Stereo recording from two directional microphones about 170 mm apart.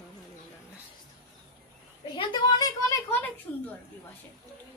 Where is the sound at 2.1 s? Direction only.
25° left (ahead or behind).